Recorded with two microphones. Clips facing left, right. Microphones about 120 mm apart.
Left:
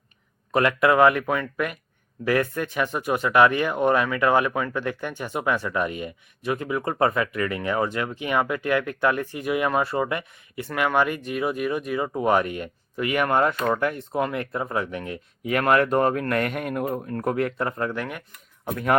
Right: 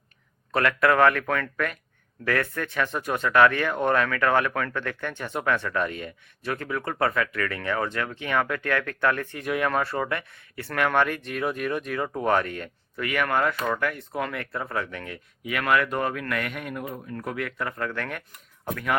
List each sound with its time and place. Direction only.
0.5 s speech: 20° left (ahead or behind)
15.4 s speech: 40° left (ahead or behind)
17.9 s speech: 15° left (ahead or behind)